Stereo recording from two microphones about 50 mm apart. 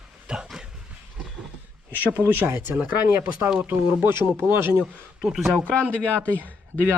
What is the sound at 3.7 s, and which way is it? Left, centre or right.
Speech, right.